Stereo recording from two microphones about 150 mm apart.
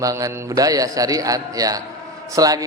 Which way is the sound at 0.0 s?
20° right (ahead or behind).